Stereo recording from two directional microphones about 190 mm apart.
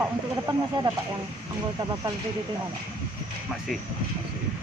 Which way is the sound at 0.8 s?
25° right (ahead or behind).